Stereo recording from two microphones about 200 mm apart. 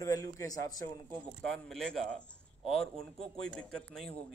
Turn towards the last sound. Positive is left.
turn(degrees=0)  # may be behind; listen again after turning